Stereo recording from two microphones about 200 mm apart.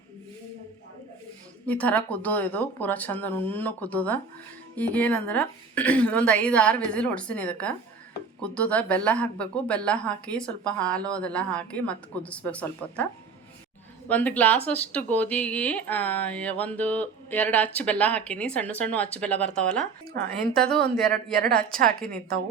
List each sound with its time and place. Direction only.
1.6 s speech: 5° left (ahead or behind)
14.1 s speech: 10° left (ahead or behind)
21.7 s a woman's voice: 45° right (ahead or behind)